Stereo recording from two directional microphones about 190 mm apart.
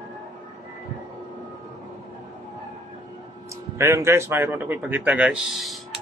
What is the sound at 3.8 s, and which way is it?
Speech, 15° right (ahead or behind).